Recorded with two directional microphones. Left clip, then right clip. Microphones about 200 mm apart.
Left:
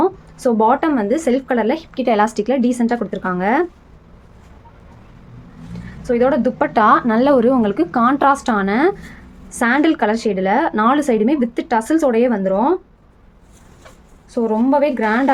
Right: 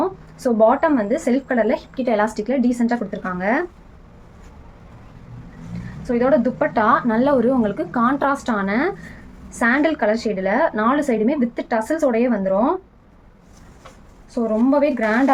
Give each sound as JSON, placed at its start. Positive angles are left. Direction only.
{"t": 0.0, "sound": "speech", "side_deg": 55}
{"t": 6.0, "sound": "speech", "side_deg": 55}
{"t": 14.3, "sound": "speech", "side_deg": 55}